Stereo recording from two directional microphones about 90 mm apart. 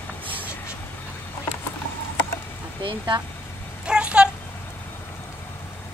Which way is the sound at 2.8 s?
65° right (ahead or behind).